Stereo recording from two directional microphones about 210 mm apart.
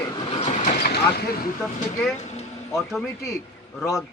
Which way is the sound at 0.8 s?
45° left (ahead or behind).